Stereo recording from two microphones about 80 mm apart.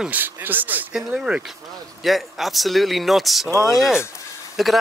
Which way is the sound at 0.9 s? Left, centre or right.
Centre.